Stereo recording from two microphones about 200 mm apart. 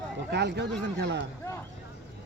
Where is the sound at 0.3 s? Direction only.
60° right (ahead or behind).